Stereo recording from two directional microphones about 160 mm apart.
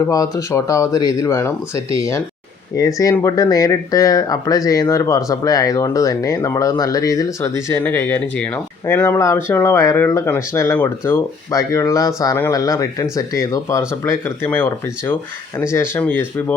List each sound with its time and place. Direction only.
0.0 s speech: 20° left (ahead or behind)